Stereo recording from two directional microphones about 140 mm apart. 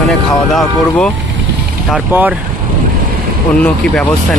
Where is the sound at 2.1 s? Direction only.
10° right (ahead or behind).